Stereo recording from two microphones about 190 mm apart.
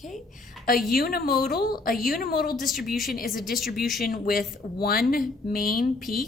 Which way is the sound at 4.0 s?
50° left (ahead or behind).